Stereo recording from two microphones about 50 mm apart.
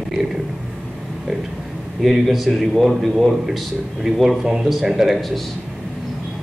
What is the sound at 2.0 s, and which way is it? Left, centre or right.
A man's voice, centre.